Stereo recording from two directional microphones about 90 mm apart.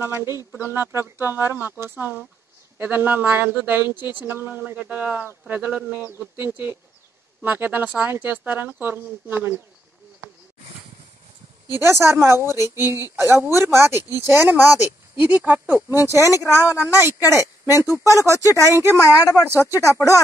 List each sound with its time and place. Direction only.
0.0 s a woman's voice: 25° right (ahead or behind)
11.7 s a woman's voice: 30° right (ahead or behind)
18.0 s speech: 35° left (ahead or behind)